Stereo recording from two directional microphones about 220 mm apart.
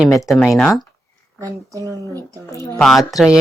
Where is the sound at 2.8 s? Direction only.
Centre (ahead or behind).